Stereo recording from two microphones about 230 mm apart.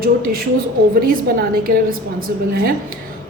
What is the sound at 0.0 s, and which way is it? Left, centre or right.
A woman's voice, right.